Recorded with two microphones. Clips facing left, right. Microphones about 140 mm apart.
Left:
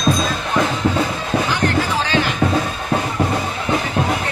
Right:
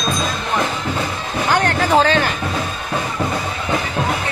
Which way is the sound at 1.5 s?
55° right (ahead or behind).